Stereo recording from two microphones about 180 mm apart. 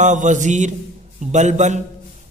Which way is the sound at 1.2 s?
40° right (ahead or behind).